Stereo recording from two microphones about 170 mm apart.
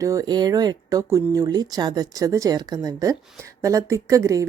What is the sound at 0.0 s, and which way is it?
A woman's voice, 20° right (ahead or behind).